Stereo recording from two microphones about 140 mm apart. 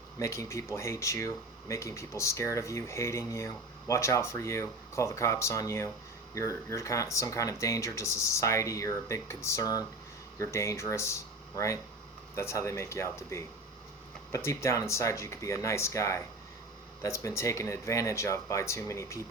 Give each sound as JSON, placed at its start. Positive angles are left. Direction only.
{"t": 0.2, "sound": "speech", "side_deg": 20}